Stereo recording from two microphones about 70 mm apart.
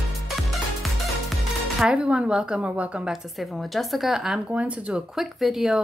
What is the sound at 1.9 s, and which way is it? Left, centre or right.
Speech, centre.